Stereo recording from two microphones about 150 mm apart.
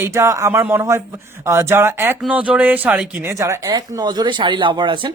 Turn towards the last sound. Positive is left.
turn(degrees=-35)  # may be behind; listen again after turning